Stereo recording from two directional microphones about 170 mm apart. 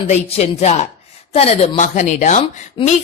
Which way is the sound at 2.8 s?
30° left (ahead or behind).